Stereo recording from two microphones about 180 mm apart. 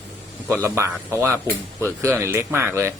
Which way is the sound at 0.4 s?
10° right (ahead or behind).